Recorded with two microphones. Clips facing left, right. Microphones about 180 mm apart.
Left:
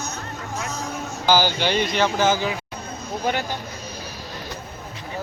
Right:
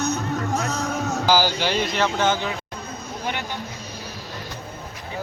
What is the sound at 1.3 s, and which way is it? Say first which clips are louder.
Speech: left 2 dB; 5° right (ahead or behind).